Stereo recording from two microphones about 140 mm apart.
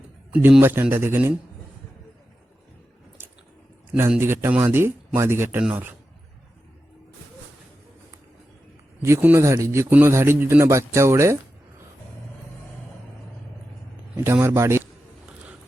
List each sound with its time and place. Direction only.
0.3 s speech: 10° right (ahead or behind)
4.2 s speech: 15° right (ahead or behind)
9.0 s a man's voice: 20° right (ahead or behind)
14.3 s a man's voice: 20° right (ahead or behind)